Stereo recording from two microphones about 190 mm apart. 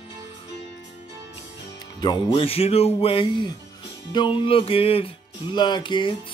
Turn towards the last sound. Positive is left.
turn(degrees=25)  # may be behind; listen again after turning